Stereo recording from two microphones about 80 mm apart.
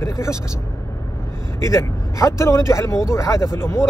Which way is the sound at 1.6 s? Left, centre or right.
Left.